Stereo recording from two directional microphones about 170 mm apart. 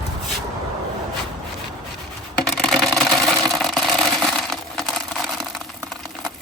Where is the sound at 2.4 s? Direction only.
Centre (ahead or behind).